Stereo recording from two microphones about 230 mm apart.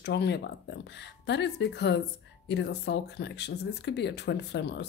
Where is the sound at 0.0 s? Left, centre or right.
Left.